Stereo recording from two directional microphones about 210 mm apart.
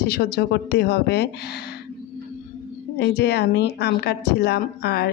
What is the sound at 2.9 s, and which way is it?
A woman's voice, 50° left (ahead or behind).